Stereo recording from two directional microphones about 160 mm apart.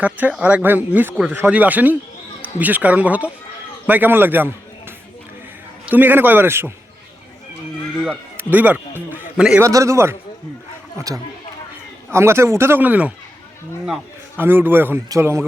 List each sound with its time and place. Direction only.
0.0 s a man's voice: 10° right (ahead or behind)
8.4 s a man's voice: 10° right (ahead or behind)
9.6 s a man's voice: 20° right (ahead or behind)
14.3 s a man's voice: 15° right (ahead or behind)